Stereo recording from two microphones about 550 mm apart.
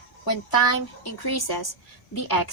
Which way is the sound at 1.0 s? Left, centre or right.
Left.